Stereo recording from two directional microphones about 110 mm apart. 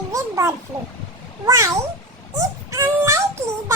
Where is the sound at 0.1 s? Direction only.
30° right (ahead or behind).